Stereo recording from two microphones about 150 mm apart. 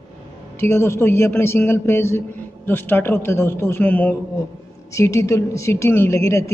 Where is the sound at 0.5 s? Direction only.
15° left (ahead or behind).